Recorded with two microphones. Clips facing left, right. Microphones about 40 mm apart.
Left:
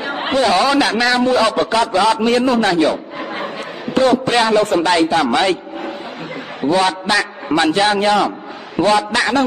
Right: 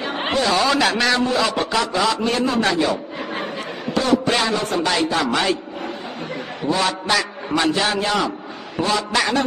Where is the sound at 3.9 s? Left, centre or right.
Left.